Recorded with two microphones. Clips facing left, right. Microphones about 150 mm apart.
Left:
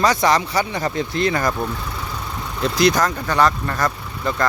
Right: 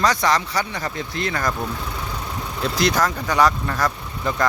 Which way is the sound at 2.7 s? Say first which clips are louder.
Left 3 dB; 5° right (ahead or behind).